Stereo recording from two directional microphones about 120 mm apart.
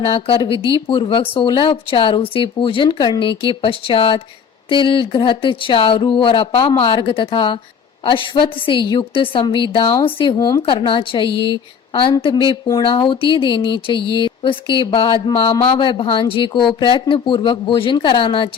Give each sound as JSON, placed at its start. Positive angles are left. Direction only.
{"t": 0.0, "sound": "speech", "side_deg": 50}
{"t": 10.3, "sound": "speech", "side_deg": 35}